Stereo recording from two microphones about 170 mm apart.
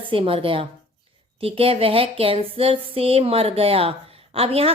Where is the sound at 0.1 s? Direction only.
30° right (ahead or behind).